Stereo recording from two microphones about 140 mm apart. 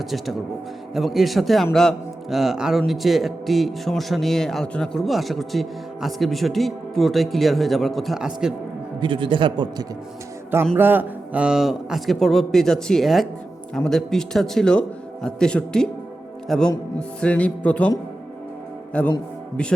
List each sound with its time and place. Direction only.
0.0 s a man's voice: centre (ahead or behind)
9.0 s a man's voice: 35° right (ahead or behind)
10.8 s a man's voice: 15° right (ahead or behind); by 16.7 s 5° left (ahead or behind)
17.2 s music: 10° left (ahead or behind)
19.0 s music: 10° left (ahead or behind)